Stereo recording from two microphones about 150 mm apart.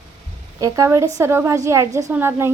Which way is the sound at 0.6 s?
20° right (ahead or behind).